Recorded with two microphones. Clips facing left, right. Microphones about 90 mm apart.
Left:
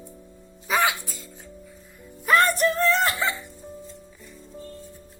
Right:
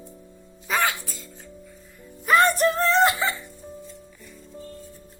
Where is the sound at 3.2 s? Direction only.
Centre (ahead or behind).